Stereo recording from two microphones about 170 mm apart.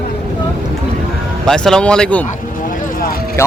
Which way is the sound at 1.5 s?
5° left (ahead or behind).